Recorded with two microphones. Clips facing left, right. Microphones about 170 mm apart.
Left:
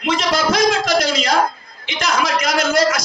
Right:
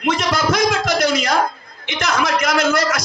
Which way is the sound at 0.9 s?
65° right (ahead or behind).